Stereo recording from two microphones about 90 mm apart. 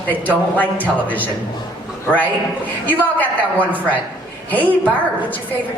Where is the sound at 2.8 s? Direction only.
20° left (ahead or behind).